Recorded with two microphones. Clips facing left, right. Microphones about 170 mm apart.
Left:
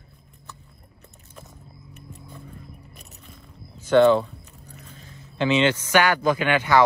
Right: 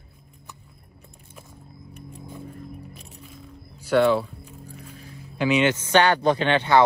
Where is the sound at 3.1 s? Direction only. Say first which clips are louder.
Right 4 dB; centre (ahead or behind).